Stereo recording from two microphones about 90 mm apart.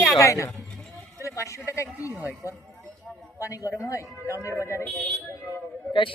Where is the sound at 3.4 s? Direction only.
35° left (ahead or behind).